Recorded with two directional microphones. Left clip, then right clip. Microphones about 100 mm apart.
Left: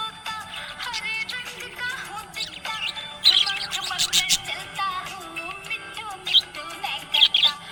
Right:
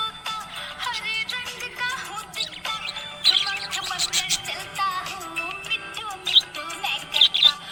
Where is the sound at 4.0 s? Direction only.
60° left (ahead or behind).